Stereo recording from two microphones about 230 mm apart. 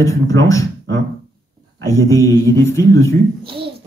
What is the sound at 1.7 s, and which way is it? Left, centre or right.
Speech, centre.